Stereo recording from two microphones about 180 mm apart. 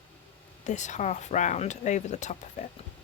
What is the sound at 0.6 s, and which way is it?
Speech, 40° left (ahead or behind).